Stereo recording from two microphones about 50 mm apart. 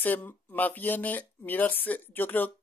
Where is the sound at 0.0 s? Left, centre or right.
Left.